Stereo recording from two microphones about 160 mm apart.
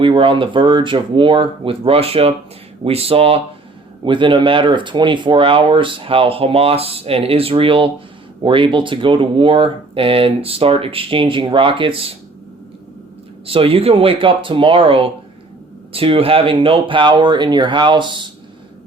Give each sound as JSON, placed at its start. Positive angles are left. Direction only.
{"t": 0.0, "sound": "speech", "side_deg": -30}
{"t": 13.5, "sound": "speech", "side_deg": -35}